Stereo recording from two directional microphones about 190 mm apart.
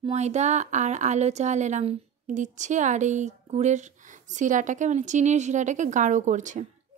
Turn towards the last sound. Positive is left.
turn(degrees=-40)  # may be behind; listen again after turning